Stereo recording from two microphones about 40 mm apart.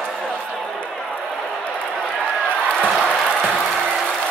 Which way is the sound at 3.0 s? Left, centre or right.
Left.